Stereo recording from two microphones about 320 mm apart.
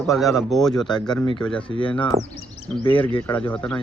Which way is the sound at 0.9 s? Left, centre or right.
Centre.